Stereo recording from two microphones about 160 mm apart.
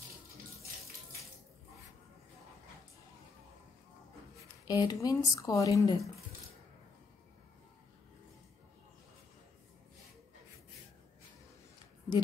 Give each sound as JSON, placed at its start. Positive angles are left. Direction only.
{"t": 4.6, "sound": "speech", "side_deg": 25}